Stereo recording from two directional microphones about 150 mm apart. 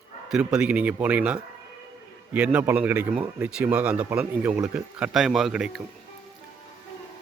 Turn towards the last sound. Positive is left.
turn(degrees=-5)  # may be behind; listen again after turning